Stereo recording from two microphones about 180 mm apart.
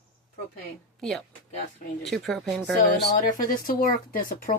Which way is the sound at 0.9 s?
Centre (ahead or behind).